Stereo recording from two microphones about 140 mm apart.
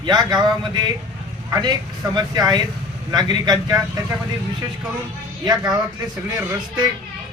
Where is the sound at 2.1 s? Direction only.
30° right (ahead or behind).